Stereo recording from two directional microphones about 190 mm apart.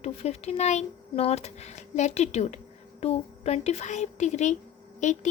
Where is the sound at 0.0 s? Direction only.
35° left (ahead or behind).